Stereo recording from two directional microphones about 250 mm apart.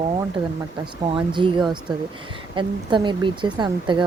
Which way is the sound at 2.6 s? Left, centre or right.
Centre.